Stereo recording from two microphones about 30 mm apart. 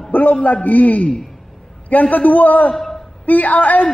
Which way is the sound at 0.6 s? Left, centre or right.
Left.